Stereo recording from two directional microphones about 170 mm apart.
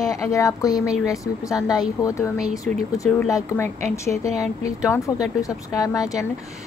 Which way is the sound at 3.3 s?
20° left (ahead or behind).